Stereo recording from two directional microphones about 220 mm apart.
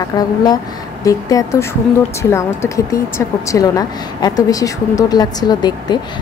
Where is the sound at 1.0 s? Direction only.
15° left (ahead or behind).